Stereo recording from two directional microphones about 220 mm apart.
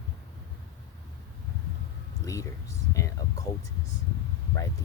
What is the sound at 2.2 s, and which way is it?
Speech, 15° left (ahead or behind).